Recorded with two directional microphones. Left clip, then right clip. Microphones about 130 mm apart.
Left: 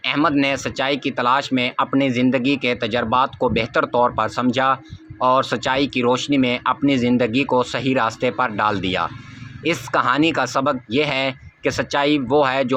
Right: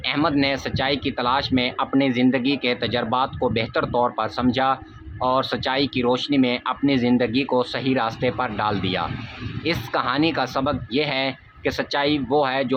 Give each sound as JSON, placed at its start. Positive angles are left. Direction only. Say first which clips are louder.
{"t": 0.0, "sound": "speech", "louder": "left 3 dB", "side_deg": 25}